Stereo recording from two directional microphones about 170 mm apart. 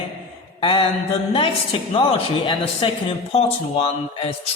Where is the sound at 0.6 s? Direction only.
30° left (ahead or behind).